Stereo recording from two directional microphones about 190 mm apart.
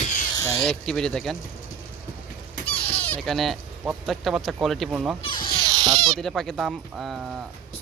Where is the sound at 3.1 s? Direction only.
Centre (ahead or behind).